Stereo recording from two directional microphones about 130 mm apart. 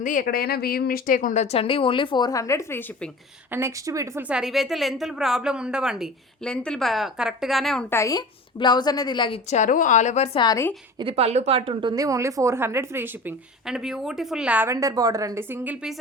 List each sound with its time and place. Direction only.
0.0 s a woman's voice: 90° left; by 2.8 s 20° left (ahead or behind)
3.5 s a woman's voice: 20° right (ahead or behind)
4.2 s speech: 5° right (ahead or behind)
6.4 s speech: 5° left (ahead or behind)
7.9 s speech: 20° left (ahead or behind)
8.5 s a woman's voice: 35° left (ahead or behind)
9.5 s a woman's voice: 75° left (ahead or behind)
10.3 s a woman's voice: 30° left (ahead or behind)
11.1 s a woman's voice: 60° right (ahead or behind); by 13.3 s 15° right (ahead or behind)
13.7 s speech: 5° right (ahead or behind)
14.7 s a woman's voice: 25° right (ahead or behind); by 16.0 s 10° right (ahead or behind)